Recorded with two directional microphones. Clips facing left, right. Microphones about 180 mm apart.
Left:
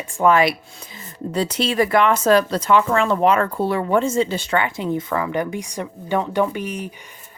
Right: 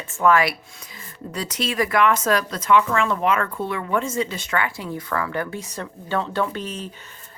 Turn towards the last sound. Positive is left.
turn(degrees=15)  # may be behind; listen again after turning